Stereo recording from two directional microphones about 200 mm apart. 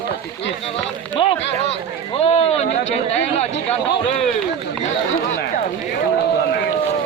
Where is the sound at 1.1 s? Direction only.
30° left (ahead or behind).